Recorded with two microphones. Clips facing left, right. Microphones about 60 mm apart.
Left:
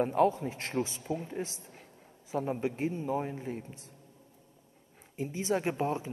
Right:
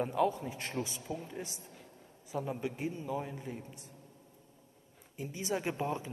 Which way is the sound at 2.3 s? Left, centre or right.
Left.